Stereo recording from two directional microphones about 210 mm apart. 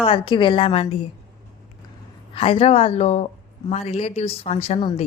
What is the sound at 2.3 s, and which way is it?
A woman's voice, 25° left (ahead or behind).